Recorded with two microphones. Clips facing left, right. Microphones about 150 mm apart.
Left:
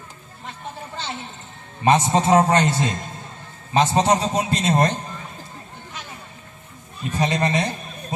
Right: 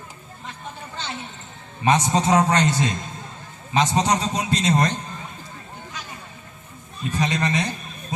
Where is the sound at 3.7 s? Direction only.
30° left (ahead or behind).